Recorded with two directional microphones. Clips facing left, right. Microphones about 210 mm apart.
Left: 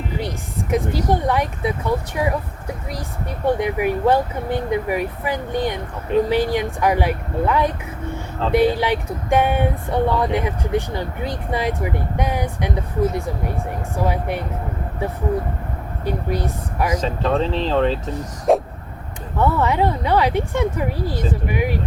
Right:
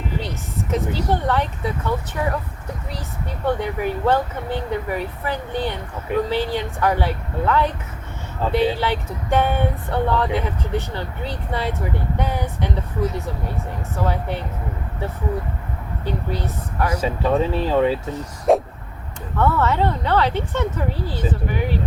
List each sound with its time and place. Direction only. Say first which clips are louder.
0.2 s speech: left 2 dB; 10° left (ahead or behind)
3.4 s speech: left 3 dB; 10° left (ahead or behind)
8.7 s speech: left 3 dB; 15° left (ahead or behind)
16.0 s speech: left 3 dB; 10° left (ahead or behind)
17.0 s speech: right 4 dB; 10° right (ahead or behind)
18.5 s a sound: even; centre (ahead or behind)
19.4 s speech: left 1 dB; 15° left (ahead or behind)